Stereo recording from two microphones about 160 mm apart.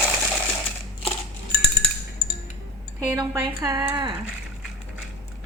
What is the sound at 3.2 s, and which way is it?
Speech, 25° right (ahead or behind).